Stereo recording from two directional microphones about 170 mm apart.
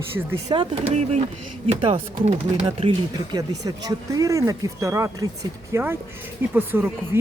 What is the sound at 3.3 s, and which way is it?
Speech, 20° right (ahead or behind).